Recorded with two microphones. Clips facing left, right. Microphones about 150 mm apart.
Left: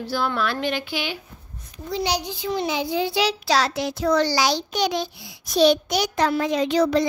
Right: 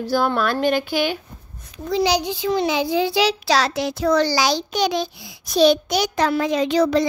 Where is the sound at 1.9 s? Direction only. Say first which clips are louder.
Right 6 dB; 90° right.